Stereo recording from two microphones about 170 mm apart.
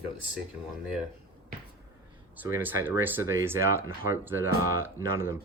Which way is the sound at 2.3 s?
10° right (ahead or behind).